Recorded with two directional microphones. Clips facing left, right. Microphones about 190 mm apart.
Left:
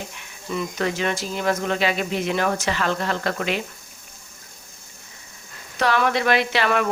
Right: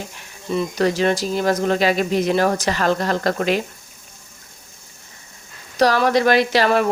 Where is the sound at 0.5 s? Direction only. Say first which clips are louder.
Right 6 dB; 35° right (ahead or behind).